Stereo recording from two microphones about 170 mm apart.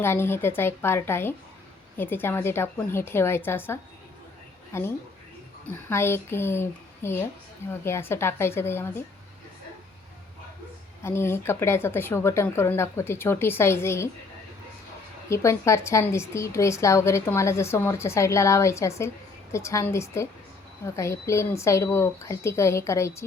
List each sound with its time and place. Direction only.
0.0 s a woman's voice: 15° left (ahead or behind)
11.0 s a woman's voice: 15° left (ahead or behind)
15.3 s a woman's voice: 15° left (ahead or behind)